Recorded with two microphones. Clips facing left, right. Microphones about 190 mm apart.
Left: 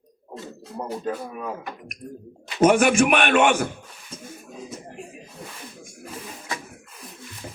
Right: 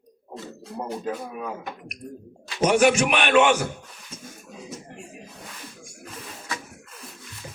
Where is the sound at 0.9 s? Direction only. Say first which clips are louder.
Left 2 dB; centre (ahead or behind).